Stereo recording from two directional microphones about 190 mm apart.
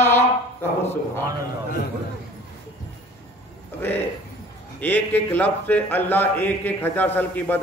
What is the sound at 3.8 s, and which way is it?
Speech, 10° left (ahead or behind).